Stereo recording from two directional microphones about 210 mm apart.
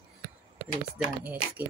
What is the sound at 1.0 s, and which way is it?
Speech, 5° right (ahead or behind).